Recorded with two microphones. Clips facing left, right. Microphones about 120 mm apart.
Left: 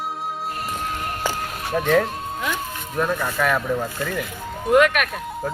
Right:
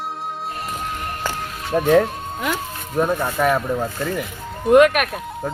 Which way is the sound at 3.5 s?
5° right (ahead or behind).